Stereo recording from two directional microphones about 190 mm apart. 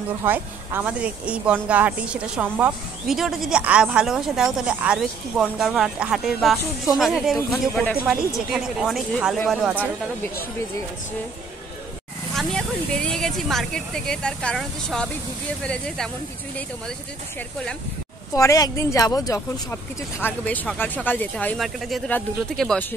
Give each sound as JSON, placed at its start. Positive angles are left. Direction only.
{"t": 0.2, "sound": "a woman's voice", "side_deg": -10}
{"t": 12.4, "sound": "a woman's voice", "side_deg": 5}
{"t": 18.3, "sound": "speech", "side_deg": 15}